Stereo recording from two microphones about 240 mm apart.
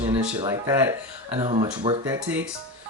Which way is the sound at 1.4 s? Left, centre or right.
Right.